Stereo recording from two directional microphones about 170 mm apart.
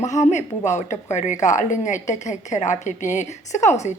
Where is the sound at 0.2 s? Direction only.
45° left (ahead or behind).